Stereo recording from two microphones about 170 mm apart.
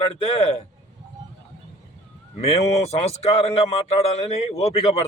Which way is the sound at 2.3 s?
35° left (ahead or behind).